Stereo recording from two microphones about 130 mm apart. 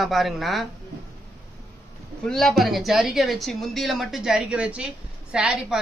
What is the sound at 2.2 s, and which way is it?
A man's voice, 5° left (ahead or behind).